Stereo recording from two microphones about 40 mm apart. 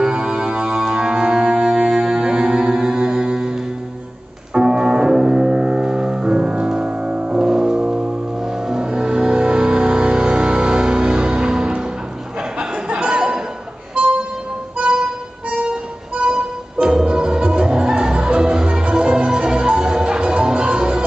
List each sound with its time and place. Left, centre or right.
0.0 s music: right
12.4 s a sound: right
14.0 s music: right
16.8 s music: centre